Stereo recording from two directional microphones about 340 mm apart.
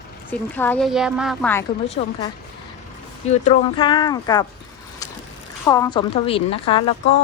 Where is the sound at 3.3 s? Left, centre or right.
Centre.